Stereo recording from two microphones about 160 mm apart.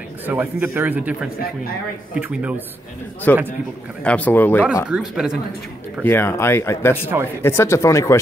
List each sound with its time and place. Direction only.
0.3 s a man's voice: 10° right (ahead or behind)
3.3 s speech: 10° left (ahead or behind)
4.8 s speech: 5° right (ahead or behind)
6.0 s speech: 15° left (ahead or behind)